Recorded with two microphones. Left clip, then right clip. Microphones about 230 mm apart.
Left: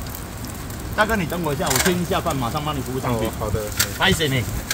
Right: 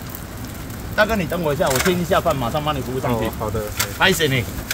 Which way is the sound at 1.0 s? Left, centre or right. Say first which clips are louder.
Right 2 dB; right.